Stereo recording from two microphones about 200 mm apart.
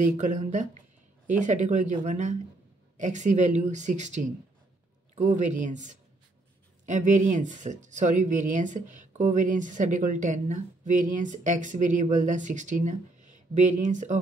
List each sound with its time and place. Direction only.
0.0 s speech: 35° right (ahead or behind)